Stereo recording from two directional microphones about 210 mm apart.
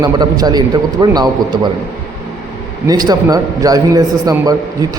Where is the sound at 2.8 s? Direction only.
20° right (ahead or behind).